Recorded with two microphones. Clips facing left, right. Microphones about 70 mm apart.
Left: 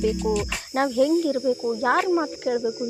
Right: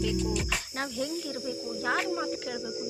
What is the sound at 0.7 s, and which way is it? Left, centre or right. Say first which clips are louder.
Speech: left 16 dB; left.